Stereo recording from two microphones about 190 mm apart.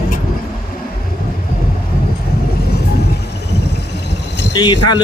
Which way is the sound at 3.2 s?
60° left (ahead or behind).